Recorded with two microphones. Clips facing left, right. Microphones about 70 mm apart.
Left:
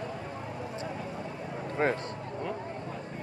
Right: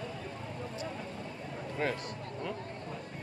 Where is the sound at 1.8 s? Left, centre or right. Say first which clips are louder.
Left 6 dB; left.